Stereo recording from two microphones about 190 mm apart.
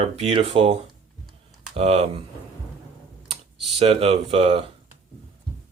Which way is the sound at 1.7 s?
35° right (ahead or behind).